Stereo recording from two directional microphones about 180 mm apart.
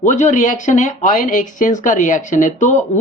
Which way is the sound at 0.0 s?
40° left (ahead or behind).